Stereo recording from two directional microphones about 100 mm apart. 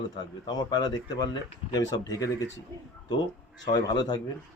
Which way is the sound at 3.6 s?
45° left (ahead or behind).